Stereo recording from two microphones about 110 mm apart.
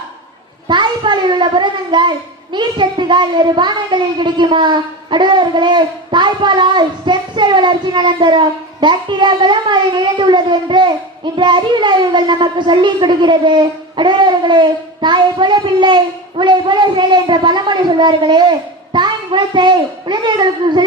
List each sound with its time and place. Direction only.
0.7 s a child's voice: 45° right (ahead or behind)